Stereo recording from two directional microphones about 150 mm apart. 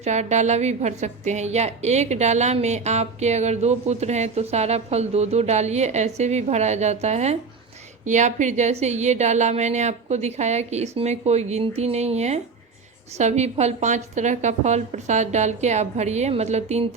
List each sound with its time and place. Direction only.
0.0 s a woman's voice: 50° right (ahead or behind)